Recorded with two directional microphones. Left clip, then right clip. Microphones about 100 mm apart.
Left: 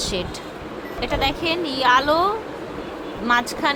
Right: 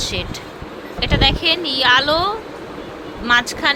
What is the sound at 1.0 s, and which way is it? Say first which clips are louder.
Speech: right 6 dB; 5° left (ahead or behind).